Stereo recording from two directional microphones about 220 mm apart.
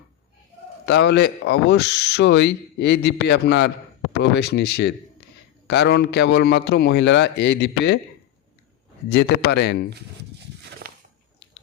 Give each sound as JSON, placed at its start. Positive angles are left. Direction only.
{"t": 0.9, "sound": "speech", "side_deg": 50}
{"t": 9.0, "sound": "speech", "side_deg": 50}